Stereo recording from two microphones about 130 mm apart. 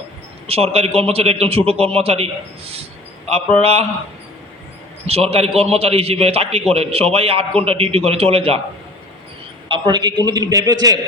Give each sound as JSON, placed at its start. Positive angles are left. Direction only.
{"t": 0.4, "sound": "a man's voice", "side_deg": -50}
{"t": 5.0, "sound": "a man's voice", "side_deg": -50}
{"t": 9.6, "sound": "a man's voice", "side_deg": -35}